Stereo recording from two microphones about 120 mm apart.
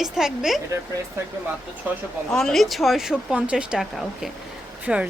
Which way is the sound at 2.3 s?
5° left (ahead or behind).